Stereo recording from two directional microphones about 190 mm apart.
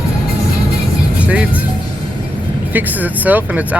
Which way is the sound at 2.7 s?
10° right (ahead or behind).